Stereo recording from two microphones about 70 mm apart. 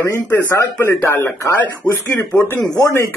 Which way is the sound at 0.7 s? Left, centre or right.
Left.